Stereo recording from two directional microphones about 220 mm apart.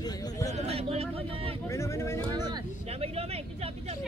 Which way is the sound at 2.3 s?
20° right (ahead or behind).